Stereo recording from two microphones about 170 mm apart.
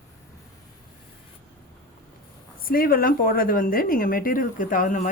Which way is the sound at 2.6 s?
60° left (ahead or behind).